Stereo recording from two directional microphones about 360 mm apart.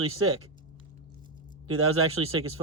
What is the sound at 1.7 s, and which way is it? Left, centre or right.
Speech, right.